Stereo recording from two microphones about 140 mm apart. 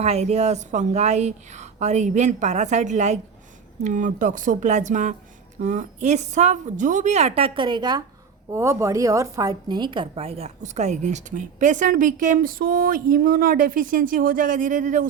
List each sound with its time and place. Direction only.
0.0 s a woman's voice: 50° right (ahead or behind); by 8.0 s 30° right (ahead or behind)
8.5 s a woman's voice: 20° right (ahead or behind); by 15.0 s 65° right (ahead or behind)